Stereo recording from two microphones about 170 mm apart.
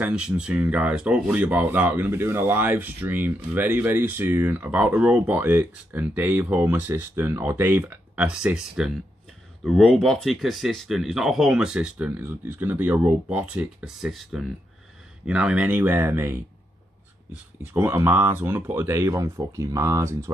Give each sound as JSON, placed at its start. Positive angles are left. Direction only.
{"t": 0.0, "sound": "speech", "side_deg": -5}